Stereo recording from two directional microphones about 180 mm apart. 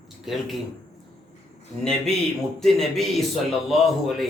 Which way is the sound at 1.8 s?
5° left (ahead or behind).